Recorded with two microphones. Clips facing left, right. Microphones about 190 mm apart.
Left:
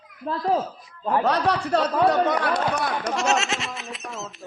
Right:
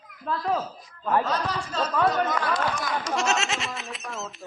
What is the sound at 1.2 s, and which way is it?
Speech, 65° left (ahead or behind).